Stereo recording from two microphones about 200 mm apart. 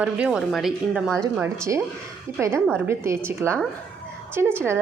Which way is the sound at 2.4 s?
15° right (ahead or behind).